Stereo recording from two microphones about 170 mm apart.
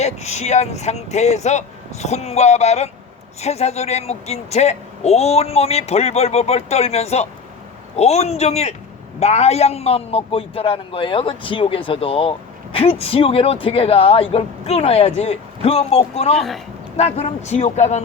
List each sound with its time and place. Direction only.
0.0 s speech: 40° left (ahead or behind)